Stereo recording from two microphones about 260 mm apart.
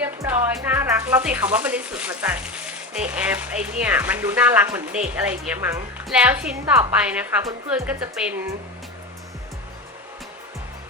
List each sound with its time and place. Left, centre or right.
0.0 s a woman's voice: centre